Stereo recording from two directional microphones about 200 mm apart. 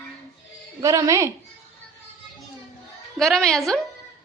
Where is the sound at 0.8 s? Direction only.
15° right (ahead or behind).